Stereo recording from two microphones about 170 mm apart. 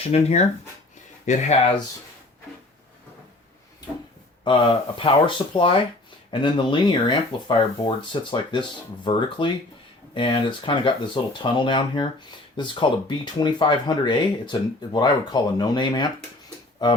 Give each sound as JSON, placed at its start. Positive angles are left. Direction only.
{"t": 0.1, "sound": "speech", "side_deg": 40}
{"t": 4.4, "sound": "speech", "side_deg": 30}